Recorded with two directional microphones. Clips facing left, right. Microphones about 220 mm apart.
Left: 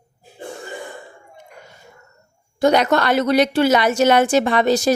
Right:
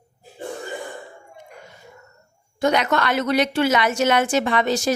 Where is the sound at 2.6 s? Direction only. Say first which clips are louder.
Left 4 dB; 35° left (ahead or behind).